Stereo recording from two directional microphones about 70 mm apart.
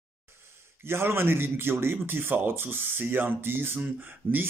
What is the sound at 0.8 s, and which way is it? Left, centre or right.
Speech, right.